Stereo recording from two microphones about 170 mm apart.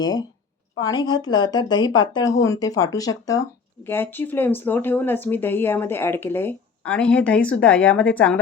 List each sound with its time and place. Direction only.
0.0 s speech: 25° left (ahead or behind)